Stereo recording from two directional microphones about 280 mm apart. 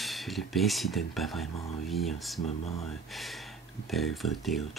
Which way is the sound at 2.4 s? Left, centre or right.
Left.